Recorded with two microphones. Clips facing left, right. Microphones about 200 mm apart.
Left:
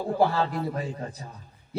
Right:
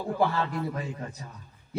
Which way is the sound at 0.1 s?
35° left (ahead or behind).